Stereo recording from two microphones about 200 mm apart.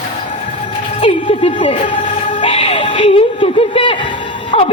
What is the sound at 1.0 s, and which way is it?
A woman's voice, 30° left (ahead or behind).